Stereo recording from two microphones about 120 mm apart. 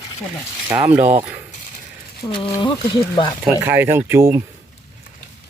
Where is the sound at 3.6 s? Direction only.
20° right (ahead or behind).